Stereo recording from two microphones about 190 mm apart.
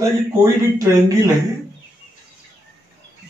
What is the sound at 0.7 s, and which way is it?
Speech, 15° right (ahead or behind).